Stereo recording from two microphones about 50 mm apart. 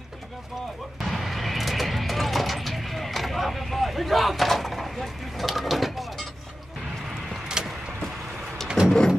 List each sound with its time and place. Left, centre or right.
1.0 s music: centre
7.6 s vehicle: centre
8.8 s a sound: centre